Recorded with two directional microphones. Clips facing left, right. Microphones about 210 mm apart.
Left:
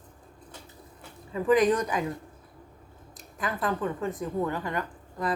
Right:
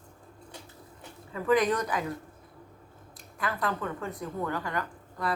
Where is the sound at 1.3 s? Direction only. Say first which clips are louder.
Left 3 dB; 15° left (ahead or behind).